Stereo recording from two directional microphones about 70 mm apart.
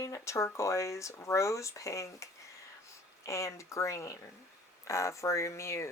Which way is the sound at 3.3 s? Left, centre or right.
Left.